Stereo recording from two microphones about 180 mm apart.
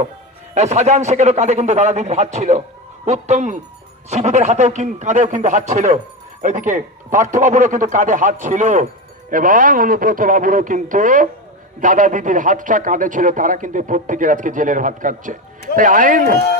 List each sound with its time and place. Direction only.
0.5 s a man's voice: 40° right (ahead or behind)